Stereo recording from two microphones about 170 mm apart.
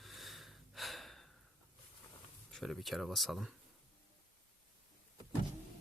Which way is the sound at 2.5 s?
Centre (ahead or behind).